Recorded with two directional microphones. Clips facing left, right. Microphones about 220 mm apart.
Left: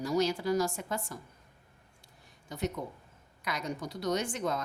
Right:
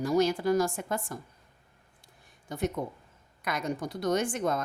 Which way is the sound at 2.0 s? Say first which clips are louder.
Right 5 dB; 50° right (ahead or behind).